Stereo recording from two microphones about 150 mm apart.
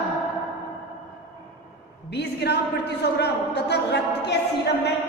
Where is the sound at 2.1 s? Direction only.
90° left.